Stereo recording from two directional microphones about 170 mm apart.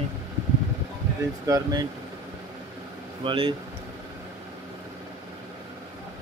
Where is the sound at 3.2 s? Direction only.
30° right (ahead or behind).